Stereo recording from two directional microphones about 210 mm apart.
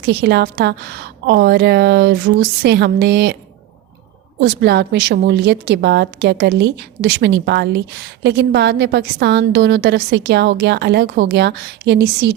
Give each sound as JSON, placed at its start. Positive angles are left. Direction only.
{"t": 0.0, "sound": "a woman's voice", "side_deg": -50}
{"t": 4.4, "sound": "a woman's voice", "side_deg": -55}